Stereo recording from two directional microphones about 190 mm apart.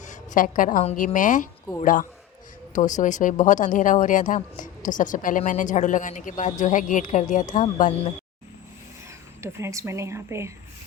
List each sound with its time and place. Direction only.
0.0 s speech: 40° left (ahead or behind)
9.4 s a woman's voice: 15° right (ahead or behind)